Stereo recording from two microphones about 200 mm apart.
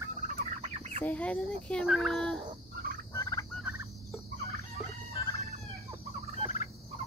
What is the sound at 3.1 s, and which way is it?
Fowl, 15° left (ahead or behind).